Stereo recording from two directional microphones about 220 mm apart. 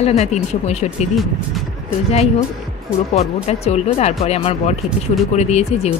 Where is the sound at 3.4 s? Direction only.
30° left (ahead or behind).